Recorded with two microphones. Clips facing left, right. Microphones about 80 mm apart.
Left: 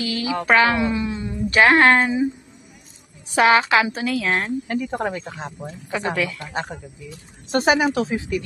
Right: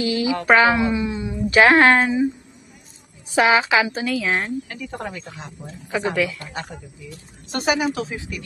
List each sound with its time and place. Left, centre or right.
0.0 s a woman's voice: right
0.5 s speech: centre
3.3 s speech: centre
4.6 s speech: left
5.9 s speech: centre
6.5 s speech: left